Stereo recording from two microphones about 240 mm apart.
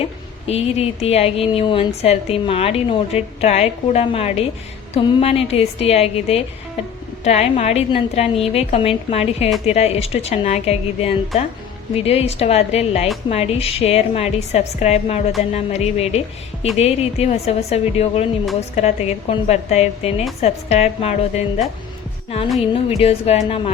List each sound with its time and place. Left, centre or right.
0.4 s a woman's voice: left
22.7 s a woman's voice: left